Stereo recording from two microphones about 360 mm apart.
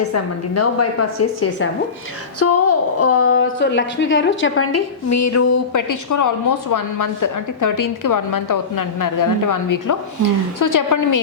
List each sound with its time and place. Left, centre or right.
0.1 s a woman's voice: left